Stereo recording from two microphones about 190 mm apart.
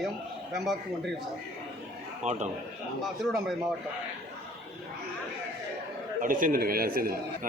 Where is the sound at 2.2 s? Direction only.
35° right (ahead or behind).